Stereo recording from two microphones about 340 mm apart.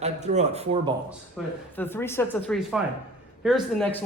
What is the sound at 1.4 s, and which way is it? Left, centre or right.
Speech, centre.